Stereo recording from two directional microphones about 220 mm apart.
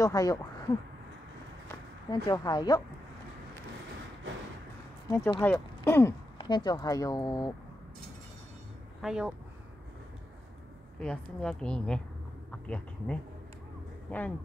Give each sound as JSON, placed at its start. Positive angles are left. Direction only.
{"t": 0.0, "sound": "speech", "side_deg": 15}
{"t": 2.0, "sound": "speech", "side_deg": 20}
{"t": 5.1, "sound": "speech", "side_deg": 10}
{"t": 9.0, "sound": "a woman's voice", "side_deg": -5}
{"t": 11.0, "sound": "a woman's voice", "side_deg": 5}
{"t": 12.4, "sound": "a sound", "side_deg": 5}
{"t": 14.1, "sound": "speech", "side_deg": 5}